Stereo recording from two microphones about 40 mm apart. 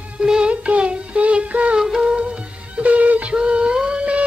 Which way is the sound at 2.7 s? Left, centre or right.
Right.